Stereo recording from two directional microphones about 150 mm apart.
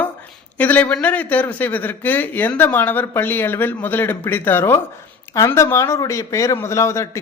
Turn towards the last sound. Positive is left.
turn(degrees=20)  # may be behind; listen again after turning